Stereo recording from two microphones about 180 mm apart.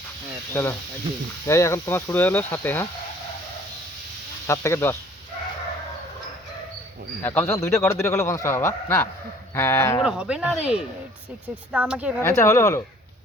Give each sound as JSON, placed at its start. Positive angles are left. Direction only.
{"t": 0.5, "sound": "a man's voice", "side_deg": 15}
{"t": 4.4, "sound": "a man's voice", "side_deg": 15}
{"t": 7.2, "sound": "a man's voice", "side_deg": 10}
{"t": 10.0, "sound": "speech", "side_deg": -5}
{"t": 12.2, "sound": "a man's voice", "side_deg": 15}